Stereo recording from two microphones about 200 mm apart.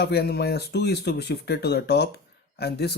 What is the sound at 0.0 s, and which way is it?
Speech, 55° left (ahead or behind).